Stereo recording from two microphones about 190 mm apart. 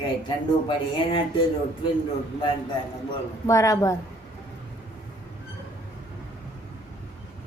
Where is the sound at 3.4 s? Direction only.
15° left (ahead or behind).